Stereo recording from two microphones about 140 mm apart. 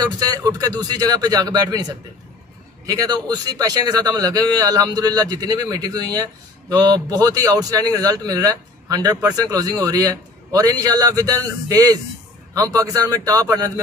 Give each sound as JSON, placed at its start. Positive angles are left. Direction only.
{"t": 0.2, "sound": "a man's voice", "side_deg": -25}